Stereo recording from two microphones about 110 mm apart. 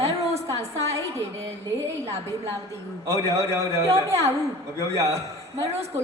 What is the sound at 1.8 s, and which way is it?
A man's voice, 25° right (ahead or behind).